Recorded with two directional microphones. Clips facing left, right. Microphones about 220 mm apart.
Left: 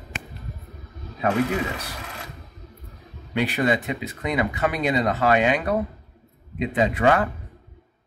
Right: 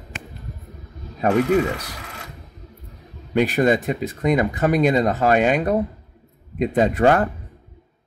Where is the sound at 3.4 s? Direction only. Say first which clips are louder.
Right 5 dB; 45° right (ahead or behind).